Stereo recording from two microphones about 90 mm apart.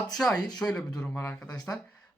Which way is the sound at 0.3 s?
50° left (ahead or behind).